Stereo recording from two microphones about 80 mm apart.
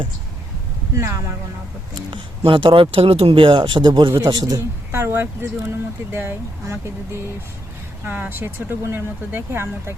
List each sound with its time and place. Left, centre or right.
0.9 s speech: right
2.5 s speech: right
4.9 s speech: right